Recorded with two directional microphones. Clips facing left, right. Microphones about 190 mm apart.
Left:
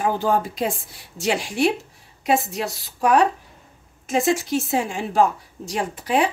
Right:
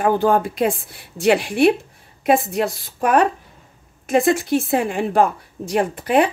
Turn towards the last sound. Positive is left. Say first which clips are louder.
# right 4 dB
turn(degrees=-55)  # may be behind; listen again after turning